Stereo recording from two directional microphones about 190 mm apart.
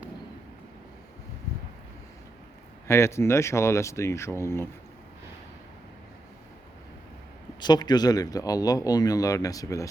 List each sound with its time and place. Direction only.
2.8 s speech: 15° left (ahead or behind)
7.6 s speech: 20° left (ahead or behind)